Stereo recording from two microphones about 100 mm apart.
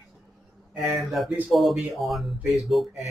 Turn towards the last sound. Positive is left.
turn(degrees=0)  # may be behind; listen again after turning